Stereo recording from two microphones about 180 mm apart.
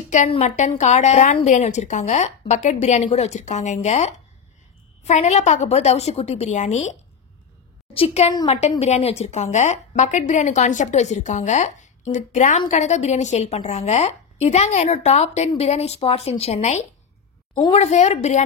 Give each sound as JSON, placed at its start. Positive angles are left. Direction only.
{"t": 0.1, "sound": "a woman's voice", "side_deg": 40}